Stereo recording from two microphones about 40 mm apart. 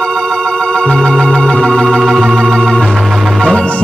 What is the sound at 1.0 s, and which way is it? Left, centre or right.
Organ, centre.